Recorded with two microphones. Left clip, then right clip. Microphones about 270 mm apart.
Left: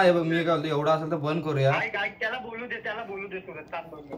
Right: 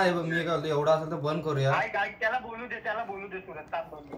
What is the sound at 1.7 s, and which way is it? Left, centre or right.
A man's voice, centre.